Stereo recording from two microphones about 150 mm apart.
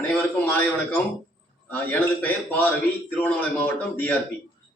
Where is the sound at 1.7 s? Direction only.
10° left (ahead or behind).